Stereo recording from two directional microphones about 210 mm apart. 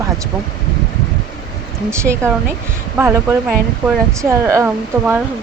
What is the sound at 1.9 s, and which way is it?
Speech, 10° right (ahead or behind).